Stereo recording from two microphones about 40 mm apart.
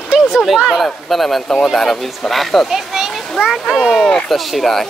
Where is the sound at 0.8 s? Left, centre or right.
Centre.